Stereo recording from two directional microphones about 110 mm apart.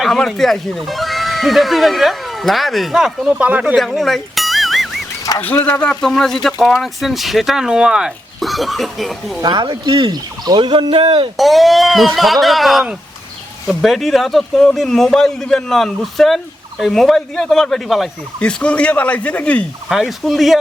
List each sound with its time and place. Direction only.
0.0 s speech: centre (ahead or behind)
3.8 s music: centre (ahead or behind)
5.4 s speech: 15° left (ahead or behind); by 9.4 s centre (ahead or behind)
9.4 s speech: 40° right (ahead or behind)
11.3 s speech: centre (ahead or behind)
18.3 s speech: 10° left (ahead or behind)
19.9 s speech: centre (ahead or behind)